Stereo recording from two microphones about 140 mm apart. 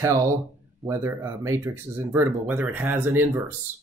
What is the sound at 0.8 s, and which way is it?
Speech, 20° right (ahead or behind).